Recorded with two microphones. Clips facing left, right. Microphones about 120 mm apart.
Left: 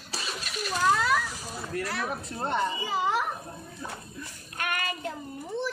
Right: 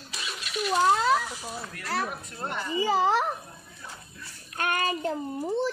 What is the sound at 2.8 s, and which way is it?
Speech, 35° right (ahead or behind).